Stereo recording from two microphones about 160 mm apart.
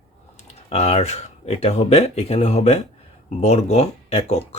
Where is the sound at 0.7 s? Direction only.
40° left (ahead or behind).